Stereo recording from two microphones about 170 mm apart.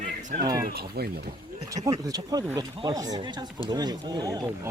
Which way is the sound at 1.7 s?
20° right (ahead or behind).